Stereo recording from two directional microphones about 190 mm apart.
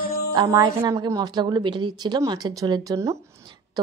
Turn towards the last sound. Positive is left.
turn(degrees=-15)  # may be behind; listen again after turning